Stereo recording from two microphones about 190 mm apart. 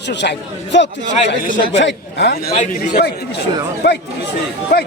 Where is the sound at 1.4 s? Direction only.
45° left (ahead or behind).